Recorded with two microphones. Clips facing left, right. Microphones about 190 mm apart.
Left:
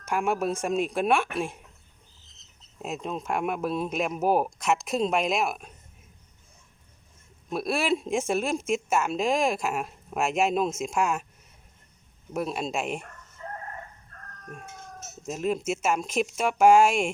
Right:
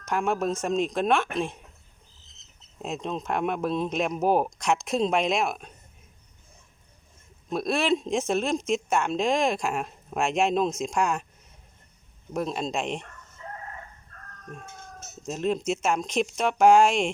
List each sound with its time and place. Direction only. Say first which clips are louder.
0.0 s speech: even; 10° left (ahead or behind)
2.8 s speech: right 1 dB; 5° left (ahead or behind)
7.5 s speech: right 2 dB; 5° left (ahead or behind)
12.3 s speech: right 1 dB; 5° left (ahead or behind)
14.5 s speech: even; 10° left (ahead or behind)